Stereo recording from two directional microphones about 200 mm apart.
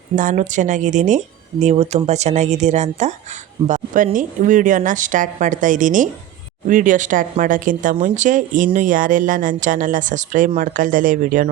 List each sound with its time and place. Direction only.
0.2 s speech: 40° right (ahead or behind)